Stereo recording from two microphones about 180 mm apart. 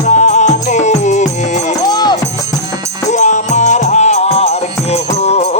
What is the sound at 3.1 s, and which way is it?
Music, 40° left (ahead or behind).